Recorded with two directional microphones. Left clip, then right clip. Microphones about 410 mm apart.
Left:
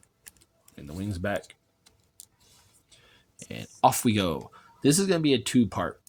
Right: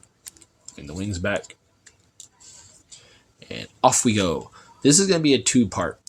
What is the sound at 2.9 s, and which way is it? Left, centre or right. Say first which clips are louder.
Speech: right 5 dB; left.